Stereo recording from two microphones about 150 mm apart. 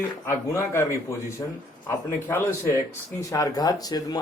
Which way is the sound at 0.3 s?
20° left (ahead or behind).